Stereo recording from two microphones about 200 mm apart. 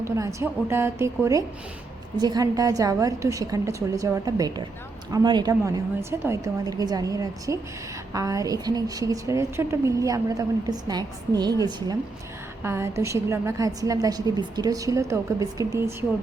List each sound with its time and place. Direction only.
0.0 s a woman's voice: 15° right (ahead or behind)
12.6 s a woman's voice: 15° right (ahead or behind)